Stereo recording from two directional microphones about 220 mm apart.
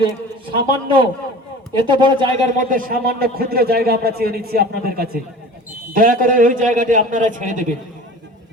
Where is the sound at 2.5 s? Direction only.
40° right (ahead or behind).